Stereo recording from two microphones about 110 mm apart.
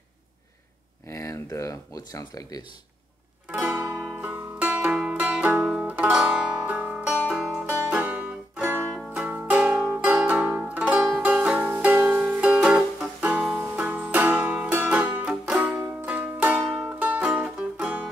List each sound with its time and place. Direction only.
1.0 s speech: 25° left (ahead or behind)
3.4 s music: 15° right (ahead or behind)